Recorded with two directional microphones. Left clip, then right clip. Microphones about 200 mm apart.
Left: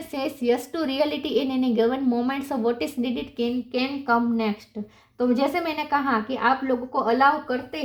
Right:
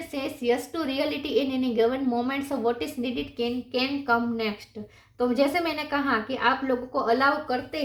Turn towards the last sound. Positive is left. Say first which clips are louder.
# left 3 dB
turn(degrees=35)  # may be behind; listen again after turning